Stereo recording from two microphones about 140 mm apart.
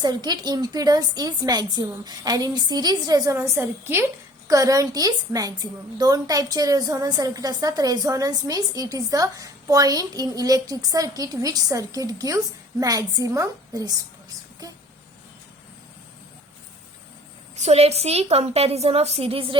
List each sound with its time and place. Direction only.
0.0 s a woman's voice: 30° right (ahead or behind)
14.6 s a sound: 25° right (ahead or behind)
17.5 s a woman's voice: 50° right (ahead or behind)